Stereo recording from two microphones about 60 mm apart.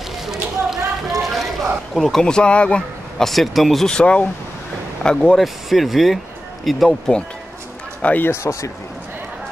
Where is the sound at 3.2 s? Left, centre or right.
Centre.